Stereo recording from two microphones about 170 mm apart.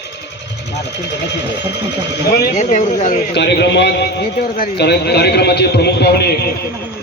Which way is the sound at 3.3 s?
90° left.